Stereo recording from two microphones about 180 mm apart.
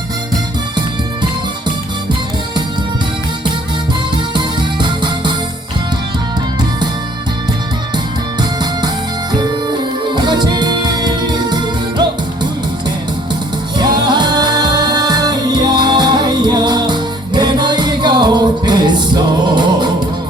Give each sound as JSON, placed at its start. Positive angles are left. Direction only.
{"t": 4.4, "sound": "music", "side_deg": -25}
{"t": 9.3, "sound": "music", "side_deg": -25}
{"t": 13.7, "sound": "music", "side_deg": -25}